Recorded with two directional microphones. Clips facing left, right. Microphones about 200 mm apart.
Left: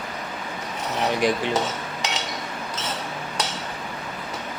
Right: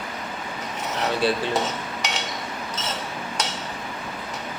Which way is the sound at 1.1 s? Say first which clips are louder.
Even; 15° left (ahead or behind).